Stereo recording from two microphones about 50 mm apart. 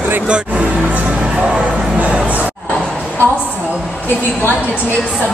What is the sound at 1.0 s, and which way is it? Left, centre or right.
Music, centre.